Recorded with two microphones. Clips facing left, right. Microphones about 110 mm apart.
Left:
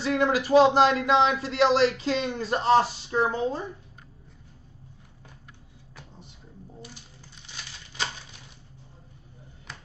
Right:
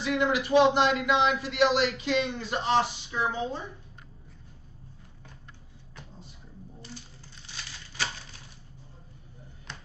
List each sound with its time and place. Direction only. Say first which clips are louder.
0.0 s speech: left 2 dB; 35° left (ahead or behind)